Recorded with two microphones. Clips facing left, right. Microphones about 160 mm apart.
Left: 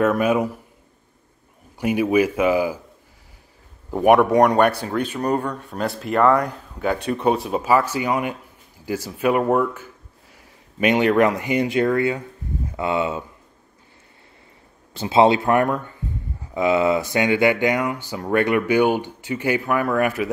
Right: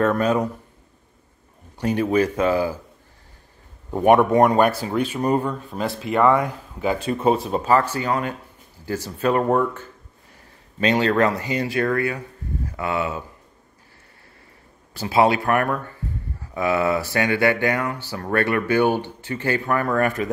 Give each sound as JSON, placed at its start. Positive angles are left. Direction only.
{"t": 0.0, "sound": "speech", "side_deg": 10}
{"t": 1.8, "sound": "speech", "side_deg": 10}
{"t": 4.0, "sound": "speech", "side_deg": 0}
{"t": 15.0, "sound": "speech", "side_deg": 25}